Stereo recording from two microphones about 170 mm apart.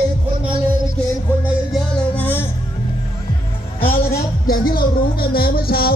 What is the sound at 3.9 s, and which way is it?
Speech, 60° left (ahead or behind).